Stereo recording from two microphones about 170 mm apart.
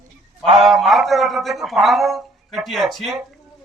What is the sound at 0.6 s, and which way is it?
A man's voice, centre (ahead or behind).